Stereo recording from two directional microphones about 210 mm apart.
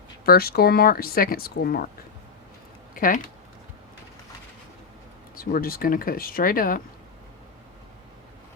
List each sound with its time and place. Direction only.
0.3 s speech: 45° left (ahead or behind)
2.9 s speech: 40° left (ahead or behind)
5.4 s speech: 45° left (ahead or behind)